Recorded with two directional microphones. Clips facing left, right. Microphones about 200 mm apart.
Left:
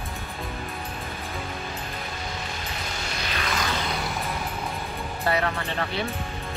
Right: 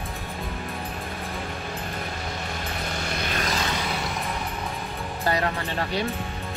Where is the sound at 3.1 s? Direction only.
50° right (ahead or behind).